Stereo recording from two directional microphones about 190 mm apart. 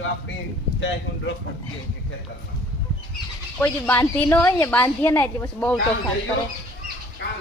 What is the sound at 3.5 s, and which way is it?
A woman's voice, 10° left (ahead or behind).